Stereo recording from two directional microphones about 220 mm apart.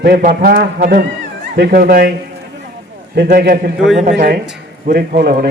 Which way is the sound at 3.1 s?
45° right (ahead or behind).